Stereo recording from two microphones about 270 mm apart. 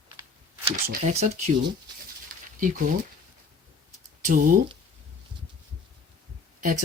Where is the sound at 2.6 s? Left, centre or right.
Right.